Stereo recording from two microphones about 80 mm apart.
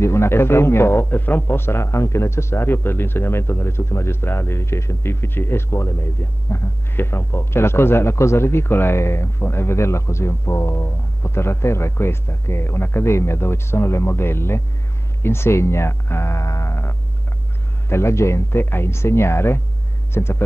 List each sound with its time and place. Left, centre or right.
0.0 s speech: left